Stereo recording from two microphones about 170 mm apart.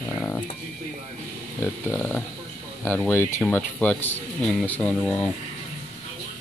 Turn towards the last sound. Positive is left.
turn(degrees=5)  # may be behind; listen again after turning